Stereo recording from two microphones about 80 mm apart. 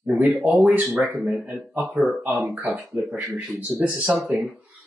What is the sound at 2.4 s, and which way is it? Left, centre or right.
Speech, right.